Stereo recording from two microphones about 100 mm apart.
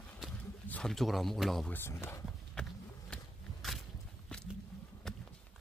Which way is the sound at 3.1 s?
Centre (ahead or behind).